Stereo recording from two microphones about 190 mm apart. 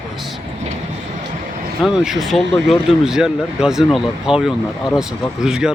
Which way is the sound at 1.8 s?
Centre (ahead or behind).